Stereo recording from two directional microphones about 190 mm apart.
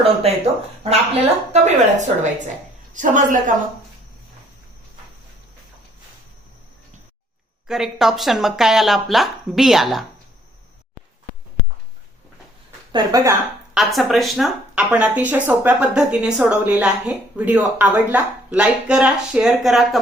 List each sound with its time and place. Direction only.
0.9 s speech: 35° right (ahead or behind)
7.7 s speech: centre (ahead or behind)
12.9 s speech: 20° right (ahead or behind)
13.7 s speech: centre (ahead or behind)